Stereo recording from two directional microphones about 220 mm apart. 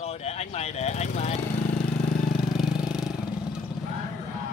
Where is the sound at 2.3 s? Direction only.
Centre (ahead or behind).